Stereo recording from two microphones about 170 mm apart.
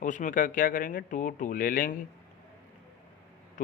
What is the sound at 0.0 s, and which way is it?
Speech, 50° left (ahead or behind).